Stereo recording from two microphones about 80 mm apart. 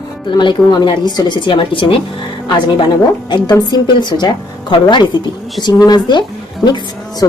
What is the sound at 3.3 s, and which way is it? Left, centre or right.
A woman's voice, left.